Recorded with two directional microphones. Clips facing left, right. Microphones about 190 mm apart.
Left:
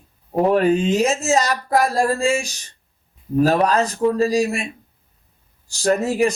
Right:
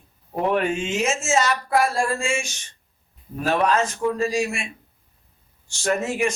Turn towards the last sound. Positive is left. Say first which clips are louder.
# left 5 dB
turn(degrees=35)  # may be behind; listen again after turning